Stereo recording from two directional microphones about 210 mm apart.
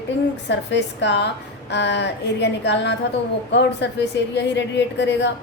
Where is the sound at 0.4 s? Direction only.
55° left (ahead or behind).